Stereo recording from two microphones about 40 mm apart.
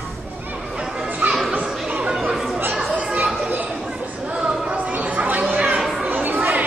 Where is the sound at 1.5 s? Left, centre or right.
Right.